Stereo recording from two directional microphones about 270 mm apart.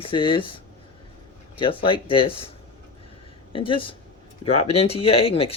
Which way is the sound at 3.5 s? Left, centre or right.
Centre.